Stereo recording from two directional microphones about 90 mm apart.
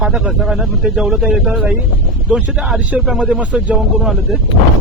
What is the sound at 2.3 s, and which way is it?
Speech, 15° right (ahead or behind).